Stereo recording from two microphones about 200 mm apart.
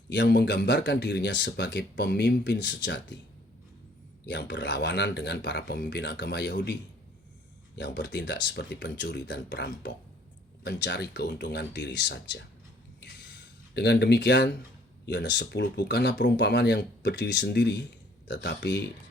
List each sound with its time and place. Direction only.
0.1 s speech: 60° left (ahead or behind)
4.3 s speech: 60° left (ahead or behind)
7.8 s speech: 60° left (ahead or behind)
13.0 s a sound: 60° left (ahead or behind)
15.0 s speech: 60° left (ahead or behind)